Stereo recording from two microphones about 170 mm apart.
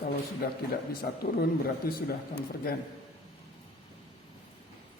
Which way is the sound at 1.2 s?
65° left (ahead or behind).